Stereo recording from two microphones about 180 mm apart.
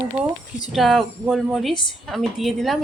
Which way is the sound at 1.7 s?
25° left (ahead or behind).